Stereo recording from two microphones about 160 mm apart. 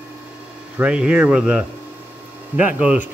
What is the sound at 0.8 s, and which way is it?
Speech, 5° right (ahead or behind).